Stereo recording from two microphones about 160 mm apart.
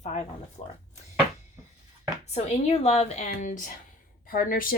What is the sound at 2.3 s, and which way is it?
A woman's voice, 40° left (ahead or behind).